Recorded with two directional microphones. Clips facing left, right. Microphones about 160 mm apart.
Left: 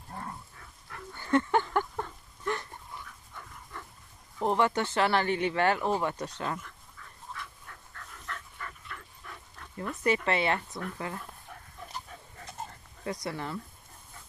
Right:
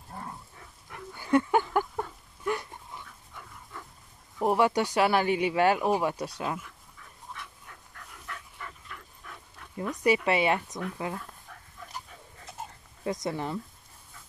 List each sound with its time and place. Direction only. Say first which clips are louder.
0.1 s a sound: even; 5° right (ahead or behind)
0.6 s a sound: right 2 dB; 15° right (ahead or behind)
4.4 s speech: right 3 dB; 10° right (ahead or behind)
7.0 s dog: left 1 dB; 15° right (ahead or behind)
10.0 s speech: right 3 dB; 10° right (ahead or behind)
13.0 s speech: right 4 dB; 20° right (ahead or behind)